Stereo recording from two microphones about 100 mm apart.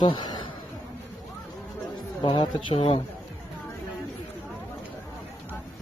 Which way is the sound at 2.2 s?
60° left (ahead or behind).